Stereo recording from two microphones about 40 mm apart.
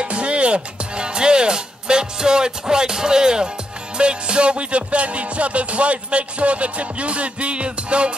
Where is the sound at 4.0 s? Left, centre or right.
Right.